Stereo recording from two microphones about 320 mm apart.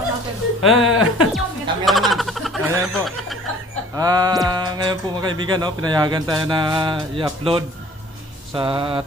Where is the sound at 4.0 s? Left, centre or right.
Centre.